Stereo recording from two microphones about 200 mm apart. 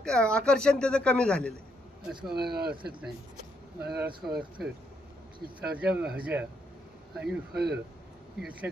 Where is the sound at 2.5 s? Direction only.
50° right (ahead or behind).